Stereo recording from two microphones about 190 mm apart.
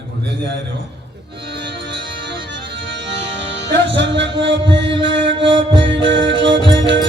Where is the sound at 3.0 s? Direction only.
70° right (ahead or behind).